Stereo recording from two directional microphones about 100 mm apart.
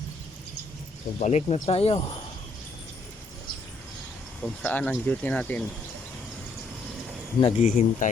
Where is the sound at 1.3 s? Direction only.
90° left.